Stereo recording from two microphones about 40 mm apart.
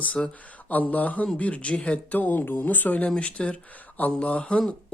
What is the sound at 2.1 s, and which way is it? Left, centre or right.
Speech, left.